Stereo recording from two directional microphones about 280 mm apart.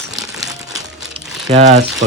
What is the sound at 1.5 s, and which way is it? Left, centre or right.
Speech, right.